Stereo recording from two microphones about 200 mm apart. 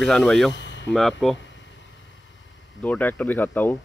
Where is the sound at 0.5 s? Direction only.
65° left (ahead or behind).